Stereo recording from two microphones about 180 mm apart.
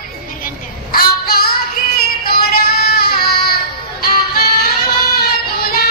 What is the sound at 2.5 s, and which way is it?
Child singing, 60° left (ahead or behind).